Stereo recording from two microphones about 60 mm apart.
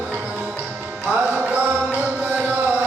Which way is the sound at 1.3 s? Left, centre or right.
Right.